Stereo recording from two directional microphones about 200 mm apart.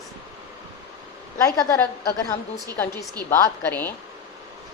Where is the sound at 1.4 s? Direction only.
15° left (ahead or behind).